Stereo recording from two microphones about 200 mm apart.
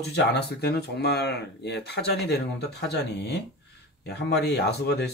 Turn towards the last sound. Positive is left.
turn(degrees=55)  # may be behind; listen again after turning